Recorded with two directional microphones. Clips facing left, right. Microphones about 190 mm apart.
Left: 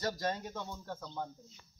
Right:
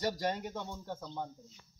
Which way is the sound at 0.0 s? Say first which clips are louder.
Right 2 dB; 15° right (ahead or behind).